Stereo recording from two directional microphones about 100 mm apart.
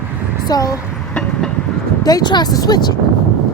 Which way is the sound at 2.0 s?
45° left (ahead or behind).